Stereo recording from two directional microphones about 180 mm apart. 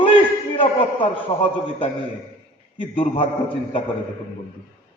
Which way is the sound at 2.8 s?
30° left (ahead or behind).